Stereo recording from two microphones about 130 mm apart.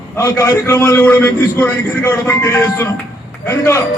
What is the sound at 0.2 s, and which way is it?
A man's voice, 25° left (ahead or behind).